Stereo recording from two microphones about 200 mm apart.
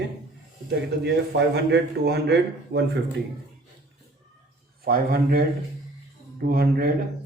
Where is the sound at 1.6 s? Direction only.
55° right (ahead or behind).